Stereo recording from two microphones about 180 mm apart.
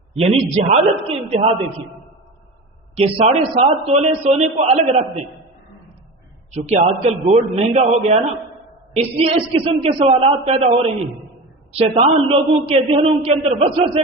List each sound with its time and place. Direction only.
0.2 s a man's voice: 35° right (ahead or behind)
2.9 s a man's voice: 35° right (ahead or behind)
6.5 s a man's voice: 40° right (ahead or behind)
11.8 s a man's voice: 30° right (ahead or behind)